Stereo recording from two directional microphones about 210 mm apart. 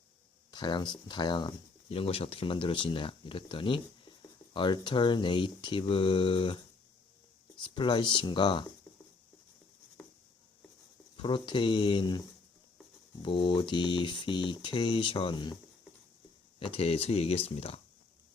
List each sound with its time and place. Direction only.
0.5 s speech: 20° left (ahead or behind)
10.0 s writing: 10° left (ahead or behind)
11.2 s speech: 25° left (ahead or behind)
16.6 s speech: 25° left (ahead or behind)